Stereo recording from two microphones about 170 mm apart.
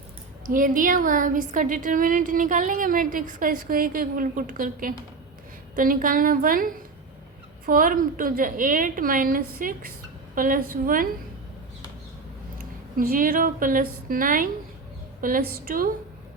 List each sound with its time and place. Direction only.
0.4 s a woman's voice: 55° right (ahead or behind)
12.5 s a woman's voice: 55° right (ahead or behind)